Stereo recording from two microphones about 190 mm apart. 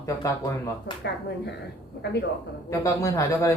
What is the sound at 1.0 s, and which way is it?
Speech, 65° left (ahead or behind).